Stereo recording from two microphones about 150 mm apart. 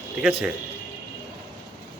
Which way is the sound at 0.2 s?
5° right (ahead or behind).